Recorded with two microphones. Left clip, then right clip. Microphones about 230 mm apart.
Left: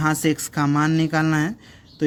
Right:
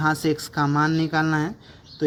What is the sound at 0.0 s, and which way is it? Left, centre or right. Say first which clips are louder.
Speech: left 1 dB; left.